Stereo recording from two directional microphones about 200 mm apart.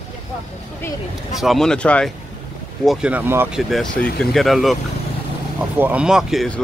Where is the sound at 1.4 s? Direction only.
Centre (ahead or behind).